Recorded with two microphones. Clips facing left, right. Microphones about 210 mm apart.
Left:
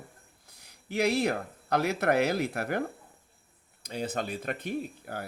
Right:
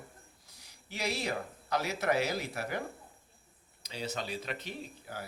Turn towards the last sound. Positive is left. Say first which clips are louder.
# left 8 dB
turn(degrees=50)  # may be behind; listen again after turning